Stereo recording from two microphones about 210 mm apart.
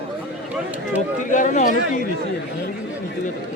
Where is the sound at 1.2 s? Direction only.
35° left (ahead or behind).